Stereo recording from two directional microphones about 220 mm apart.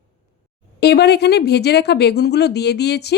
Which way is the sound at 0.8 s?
50° left (ahead or behind).